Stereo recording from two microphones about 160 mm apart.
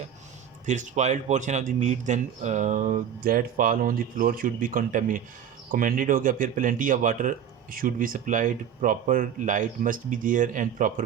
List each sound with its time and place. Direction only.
0.6 s speech: 50° right (ahead or behind)